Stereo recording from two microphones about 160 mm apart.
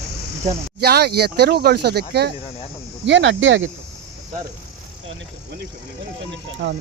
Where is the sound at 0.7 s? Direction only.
85° right.